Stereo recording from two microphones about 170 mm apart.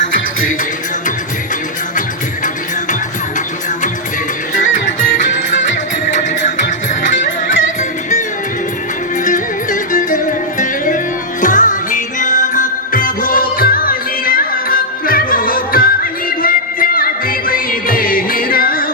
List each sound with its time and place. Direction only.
4.5 s music: 50° left (ahead or behind)
9.2 s music: 50° left (ahead or behind)